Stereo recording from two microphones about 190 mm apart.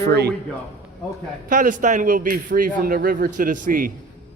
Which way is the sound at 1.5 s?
45° right (ahead or behind).